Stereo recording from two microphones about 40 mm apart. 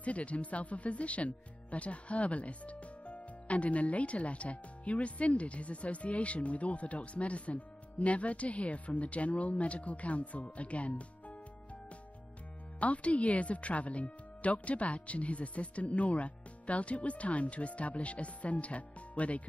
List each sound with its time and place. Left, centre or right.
0.0 s speech: left
12.8 s speech: left